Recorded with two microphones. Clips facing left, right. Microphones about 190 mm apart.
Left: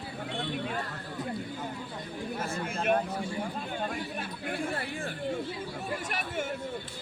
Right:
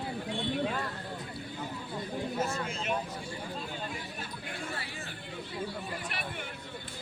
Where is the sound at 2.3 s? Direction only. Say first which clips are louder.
Left 2 dB; 55° left (ahead or behind).